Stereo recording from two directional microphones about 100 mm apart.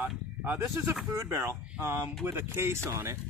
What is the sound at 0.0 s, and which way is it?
Speech, 20° right (ahead or behind).